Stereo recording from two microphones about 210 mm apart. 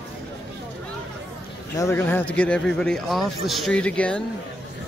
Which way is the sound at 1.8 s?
10° left (ahead or behind).